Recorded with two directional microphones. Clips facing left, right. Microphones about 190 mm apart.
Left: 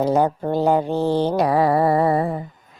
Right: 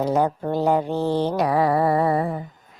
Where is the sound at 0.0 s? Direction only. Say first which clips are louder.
Left 2 dB; 30° left (ahead or behind).